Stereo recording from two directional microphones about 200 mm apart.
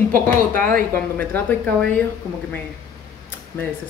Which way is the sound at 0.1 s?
45° right (ahead or behind).